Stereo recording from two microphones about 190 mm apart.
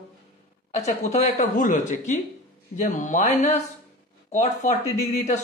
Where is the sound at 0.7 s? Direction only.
35° left (ahead or behind).